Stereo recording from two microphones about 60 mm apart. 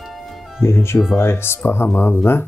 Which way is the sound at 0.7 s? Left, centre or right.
Left.